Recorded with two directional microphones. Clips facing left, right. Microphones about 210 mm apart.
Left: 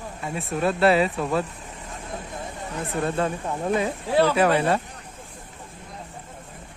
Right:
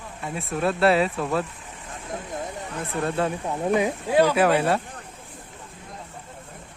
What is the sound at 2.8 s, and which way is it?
Speech, centre (ahead or behind).